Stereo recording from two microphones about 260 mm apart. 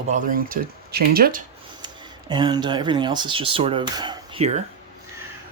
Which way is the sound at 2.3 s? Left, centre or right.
Centre.